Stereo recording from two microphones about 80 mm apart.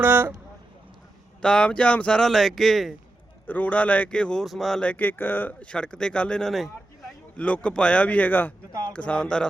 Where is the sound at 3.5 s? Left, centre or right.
Left.